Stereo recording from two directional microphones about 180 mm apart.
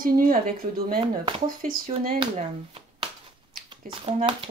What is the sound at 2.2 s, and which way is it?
Speech, 35° right (ahead or behind).